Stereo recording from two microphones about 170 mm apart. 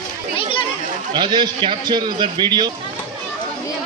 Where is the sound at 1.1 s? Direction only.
25° right (ahead or behind).